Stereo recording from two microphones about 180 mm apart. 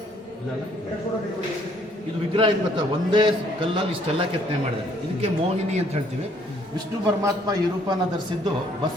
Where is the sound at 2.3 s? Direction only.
25° right (ahead or behind).